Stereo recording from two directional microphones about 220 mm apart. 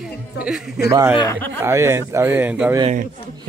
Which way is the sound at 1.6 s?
10° right (ahead or behind).